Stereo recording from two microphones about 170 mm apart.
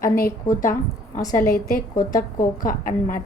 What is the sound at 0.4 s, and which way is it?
A woman's voice, 50° left (ahead or behind).